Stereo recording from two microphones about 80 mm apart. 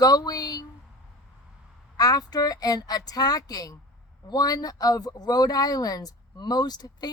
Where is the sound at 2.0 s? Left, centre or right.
Left.